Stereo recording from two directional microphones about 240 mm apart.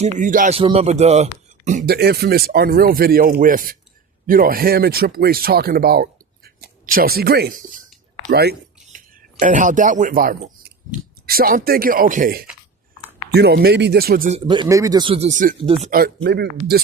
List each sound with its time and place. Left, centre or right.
0.0 s speech: right
8.3 s a sound: right
9.4 s speech: right
15.9 s speech: right